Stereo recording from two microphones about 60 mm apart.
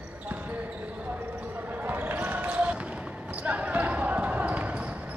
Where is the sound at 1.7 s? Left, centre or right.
Right.